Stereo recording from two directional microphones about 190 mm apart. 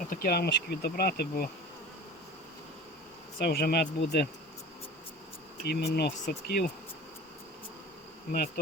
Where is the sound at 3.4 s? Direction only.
55° left (ahead or behind).